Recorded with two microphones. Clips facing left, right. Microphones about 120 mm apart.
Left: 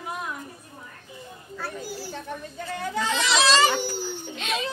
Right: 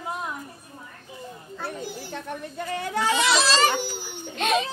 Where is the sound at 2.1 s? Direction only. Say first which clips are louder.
Right 2 dB; 65° right (ahead or behind).